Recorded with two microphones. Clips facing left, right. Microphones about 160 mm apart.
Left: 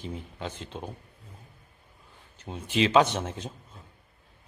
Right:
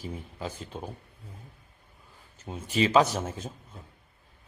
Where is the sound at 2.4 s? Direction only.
5° right (ahead or behind).